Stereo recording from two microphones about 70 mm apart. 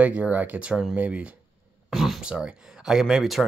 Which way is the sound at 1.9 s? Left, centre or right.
Centre.